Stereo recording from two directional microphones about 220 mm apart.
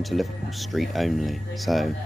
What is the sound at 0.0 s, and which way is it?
Speech, centre (ahead or behind).